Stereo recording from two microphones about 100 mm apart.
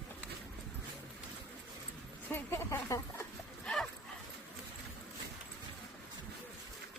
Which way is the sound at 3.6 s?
5° left (ahead or behind).